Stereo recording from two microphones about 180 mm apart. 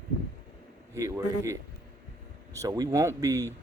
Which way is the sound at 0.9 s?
15° right (ahead or behind).